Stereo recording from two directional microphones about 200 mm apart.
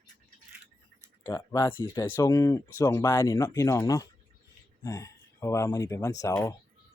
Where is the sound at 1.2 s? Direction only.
15° left (ahead or behind).